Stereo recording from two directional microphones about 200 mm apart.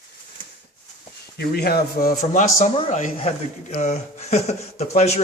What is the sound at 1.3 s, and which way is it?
A man's voice, 50° left (ahead or behind).